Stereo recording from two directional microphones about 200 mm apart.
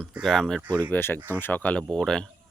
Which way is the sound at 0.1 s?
Centre (ahead or behind).